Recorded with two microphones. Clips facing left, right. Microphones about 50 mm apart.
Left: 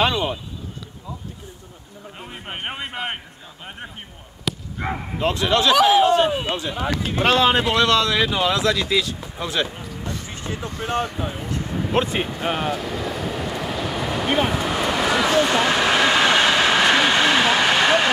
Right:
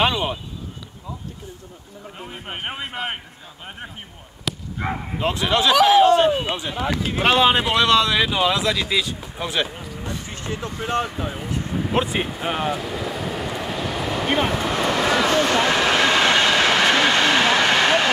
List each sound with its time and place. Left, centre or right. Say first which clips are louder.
0.0 s speech: even; right
2.1 s a man's voice: even; centre
4.5 s a sound: even; centre
5.2 s speech: left 1 dB; centre
5.8 s speech: right 3 dB; centre
6.4 s speech: left 1 dB; right
6.7 s speech: even; centre
7.2 s speech: even; right
11.0 s speech: even; centre
12.4 s vehicle: even; centre